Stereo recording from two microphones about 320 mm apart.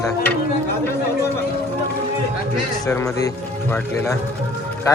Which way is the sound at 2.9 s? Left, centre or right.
Centre.